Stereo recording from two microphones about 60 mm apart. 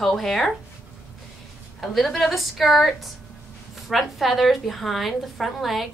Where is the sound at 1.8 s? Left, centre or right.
Centre.